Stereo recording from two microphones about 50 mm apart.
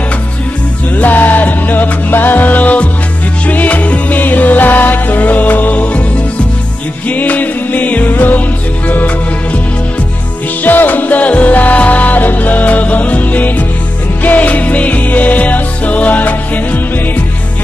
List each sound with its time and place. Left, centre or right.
0.9 s music: left
7.1 s music: left
10.6 s music: left